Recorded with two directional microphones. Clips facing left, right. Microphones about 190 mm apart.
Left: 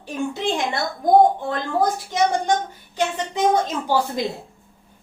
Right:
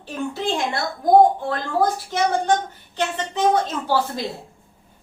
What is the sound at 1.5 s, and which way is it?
A woman's voice, 20° left (ahead or behind).